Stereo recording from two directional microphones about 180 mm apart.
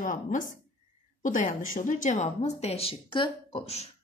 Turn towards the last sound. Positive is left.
turn(degrees=35)  # may be behind; listen again after turning